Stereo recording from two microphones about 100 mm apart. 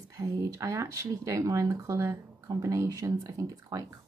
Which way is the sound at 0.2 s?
30° right (ahead or behind).